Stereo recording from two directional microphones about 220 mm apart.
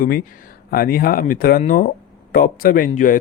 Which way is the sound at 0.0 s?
40° left (ahead or behind).